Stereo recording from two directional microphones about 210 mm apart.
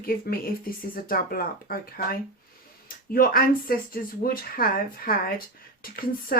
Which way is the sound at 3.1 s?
45° left (ahead or behind).